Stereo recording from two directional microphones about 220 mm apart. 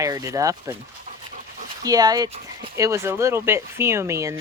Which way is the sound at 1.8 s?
15° right (ahead or behind).